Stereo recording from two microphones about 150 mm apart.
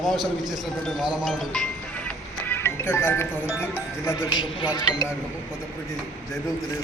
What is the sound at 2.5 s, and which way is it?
Music, 15° left (ahead or behind).